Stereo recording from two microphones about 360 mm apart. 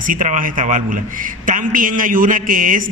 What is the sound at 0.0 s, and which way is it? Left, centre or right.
A man's voice, right.